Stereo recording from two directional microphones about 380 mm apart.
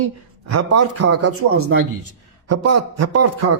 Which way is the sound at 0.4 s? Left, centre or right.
Right.